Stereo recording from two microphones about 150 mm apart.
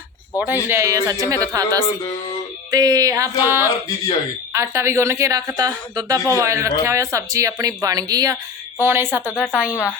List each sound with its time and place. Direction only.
0.3 s a woman's voice: 10° right (ahead or behind)
9.2 s a woman's voice: 10° left (ahead or behind)
9.5 s speech: 5° right (ahead or behind)